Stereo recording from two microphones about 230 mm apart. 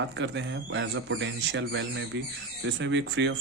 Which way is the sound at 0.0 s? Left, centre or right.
Right.